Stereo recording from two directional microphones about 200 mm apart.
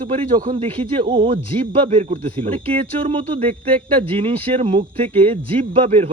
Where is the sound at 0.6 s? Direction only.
25° right (ahead or behind).